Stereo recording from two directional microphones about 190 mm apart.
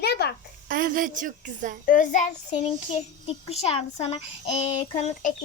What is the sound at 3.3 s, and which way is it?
Speech, 30° left (ahead or behind).